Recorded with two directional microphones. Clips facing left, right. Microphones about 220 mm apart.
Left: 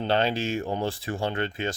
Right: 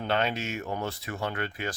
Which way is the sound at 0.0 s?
30° left (ahead or behind).